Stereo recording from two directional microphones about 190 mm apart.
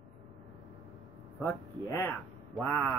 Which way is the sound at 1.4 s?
10° left (ahead or behind).